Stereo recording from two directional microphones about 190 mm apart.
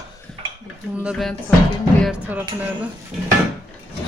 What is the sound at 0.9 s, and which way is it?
Speech, 5° right (ahead or behind).